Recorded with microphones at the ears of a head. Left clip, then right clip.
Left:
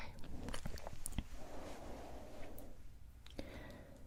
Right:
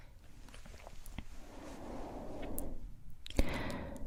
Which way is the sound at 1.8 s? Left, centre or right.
Right.